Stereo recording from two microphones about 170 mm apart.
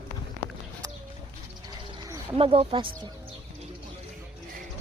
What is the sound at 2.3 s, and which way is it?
Speech, 35° right (ahead or behind).